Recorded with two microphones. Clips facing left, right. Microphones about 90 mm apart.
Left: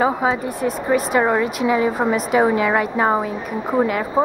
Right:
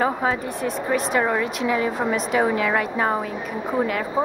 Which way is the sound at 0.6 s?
5° left (ahead or behind).